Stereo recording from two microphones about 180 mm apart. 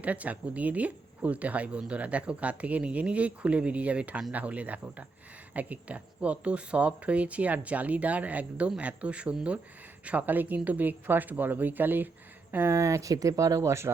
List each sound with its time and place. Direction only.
0.0 s speech: 10° right (ahead or behind)